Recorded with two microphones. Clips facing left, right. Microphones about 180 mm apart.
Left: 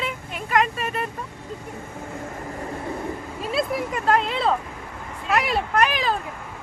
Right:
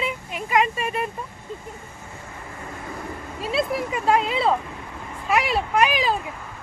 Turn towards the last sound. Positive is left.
turn(degrees=-5)  # may be behind; listen again after turning